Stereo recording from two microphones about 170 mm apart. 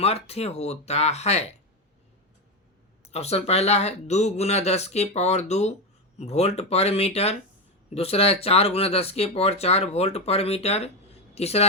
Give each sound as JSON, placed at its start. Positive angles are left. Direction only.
{"t": 0.0, "sound": "speech", "side_deg": 35}
{"t": 3.1, "sound": "speech", "side_deg": 40}